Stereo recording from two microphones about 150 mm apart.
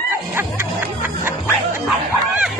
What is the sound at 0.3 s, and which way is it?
Music, 15° right (ahead or behind).